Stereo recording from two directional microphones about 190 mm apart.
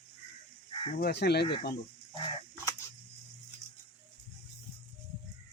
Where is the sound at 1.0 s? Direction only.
60° left (ahead or behind).